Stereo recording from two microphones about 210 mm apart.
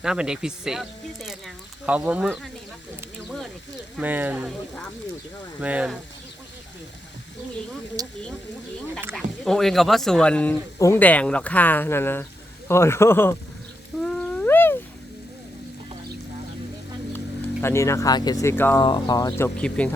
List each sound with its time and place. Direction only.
0.0 s speech: 5° right (ahead or behind)
3.9 s speech: 10° right (ahead or behind)
5.5 s speech: 5° right (ahead or behind)
8.0 s speech: 15° right (ahead or behind)
9.1 s speech: centre (ahead or behind)
14.0 s cat: 5° left (ahead or behind)
17.6 s speech: 10° left (ahead or behind)
18.8 s speech: 20° left (ahead or behind)
19.5 s speech: 5° left (ahead or behind)